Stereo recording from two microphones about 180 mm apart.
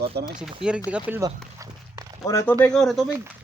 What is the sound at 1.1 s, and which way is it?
Walk, 20° right (ahead or behind).